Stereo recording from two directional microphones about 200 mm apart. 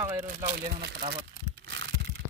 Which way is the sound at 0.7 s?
55° right (ahead or behind).